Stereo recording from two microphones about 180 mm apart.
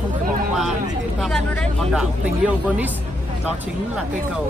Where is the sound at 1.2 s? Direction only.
5° left (ahead or behind).